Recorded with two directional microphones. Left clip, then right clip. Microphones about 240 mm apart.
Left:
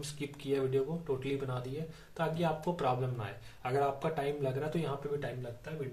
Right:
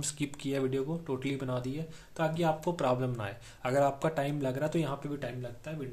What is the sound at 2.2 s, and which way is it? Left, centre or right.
Speech, right.